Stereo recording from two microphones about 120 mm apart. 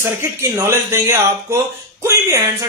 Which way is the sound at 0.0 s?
25° right (ahead or behind).